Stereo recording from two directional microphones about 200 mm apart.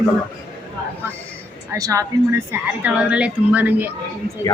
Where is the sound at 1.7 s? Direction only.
15° right (ahead or behind).